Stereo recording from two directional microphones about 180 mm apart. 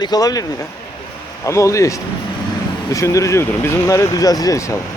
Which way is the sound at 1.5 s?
15° left (ahead or behind).